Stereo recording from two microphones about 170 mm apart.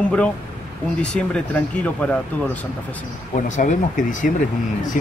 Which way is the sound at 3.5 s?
45° left (ahead or behind).